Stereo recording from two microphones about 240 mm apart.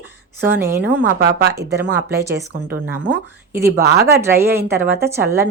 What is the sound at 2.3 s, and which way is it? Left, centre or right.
A woman's voice, right.